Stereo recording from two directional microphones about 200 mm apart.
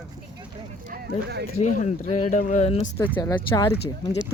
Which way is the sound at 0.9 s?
55° right (ahead or behind).